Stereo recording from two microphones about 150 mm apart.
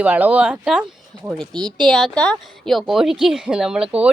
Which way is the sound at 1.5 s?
30° right (ahead or behind).